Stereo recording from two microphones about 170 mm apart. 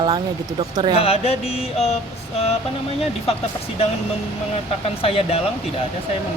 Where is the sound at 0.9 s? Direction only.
35° left (ahead or behind).